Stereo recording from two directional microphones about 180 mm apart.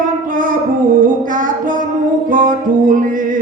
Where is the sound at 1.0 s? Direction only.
45° right (ahead or behind).